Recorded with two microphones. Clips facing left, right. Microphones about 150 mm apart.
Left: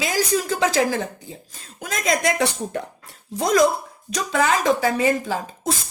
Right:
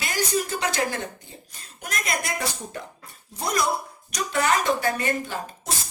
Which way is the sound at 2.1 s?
85° left.